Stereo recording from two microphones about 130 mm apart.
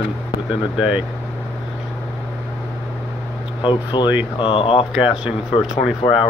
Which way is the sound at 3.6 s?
35° left (ahead or behind).